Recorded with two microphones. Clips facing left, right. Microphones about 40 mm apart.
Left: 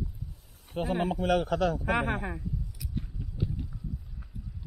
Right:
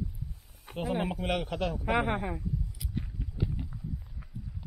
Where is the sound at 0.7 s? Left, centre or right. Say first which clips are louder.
Left 4 dB; right.